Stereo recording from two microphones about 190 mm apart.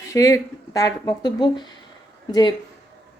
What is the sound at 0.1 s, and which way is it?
Speech, 15° left (ahead or behind).